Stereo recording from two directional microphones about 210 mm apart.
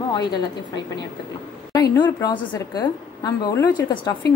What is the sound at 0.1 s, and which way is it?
Speech, 20° left (ahead or behind).